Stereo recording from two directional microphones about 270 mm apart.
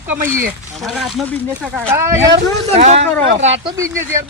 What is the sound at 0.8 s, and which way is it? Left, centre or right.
Speech, centre.